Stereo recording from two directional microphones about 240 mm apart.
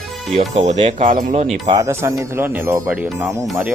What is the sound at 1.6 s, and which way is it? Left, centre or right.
Speech, centre.